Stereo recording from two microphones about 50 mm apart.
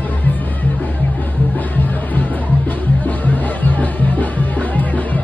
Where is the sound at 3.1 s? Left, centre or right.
Left.